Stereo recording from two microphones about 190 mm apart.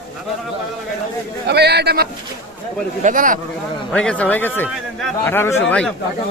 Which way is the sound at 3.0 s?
45° right (ahead or behind).